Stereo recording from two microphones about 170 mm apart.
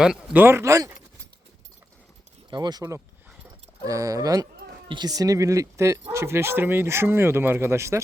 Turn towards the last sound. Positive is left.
turn(degrees=-15)  # may be behind; listen again after turning